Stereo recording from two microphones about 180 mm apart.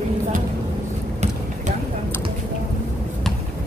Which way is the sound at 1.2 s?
35° right (ahead or behind).